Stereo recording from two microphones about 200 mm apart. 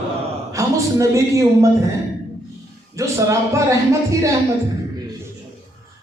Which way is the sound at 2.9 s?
15° right (ahead or behind).